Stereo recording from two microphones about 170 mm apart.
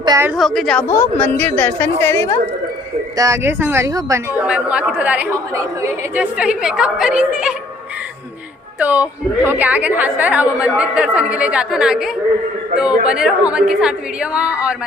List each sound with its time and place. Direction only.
0.0 s a woman's voice: 20° right (ahead or behind)
0.3 s a woman's voice: centre (ahead or behind)
0.9 s a woman's voice: 15° left (ahead or behind)
3.2 s a woman's voice: 20° right (ahead or behind)
4.4 s a woman's voice: 5° right (ahead or behind)
8.8 s a woman's voice: 10° right (ahead or behind)